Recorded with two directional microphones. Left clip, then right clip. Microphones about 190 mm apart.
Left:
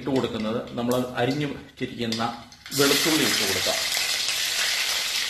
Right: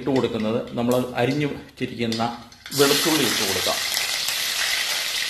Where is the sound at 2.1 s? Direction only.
5° left (ahead or behind).